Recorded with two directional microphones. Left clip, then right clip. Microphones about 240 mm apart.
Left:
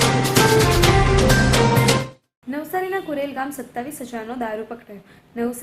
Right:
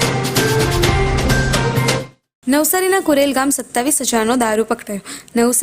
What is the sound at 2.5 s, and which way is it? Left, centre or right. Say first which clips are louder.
A woman's voice: right 9 dB; right.